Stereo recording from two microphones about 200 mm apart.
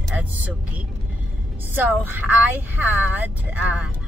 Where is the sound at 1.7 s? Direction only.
10° right (ahead or behind).